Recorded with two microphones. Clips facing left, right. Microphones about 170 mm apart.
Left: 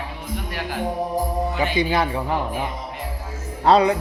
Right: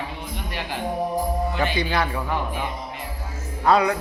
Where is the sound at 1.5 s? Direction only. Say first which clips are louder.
Left 5 dB; 15° left (ahead or behind).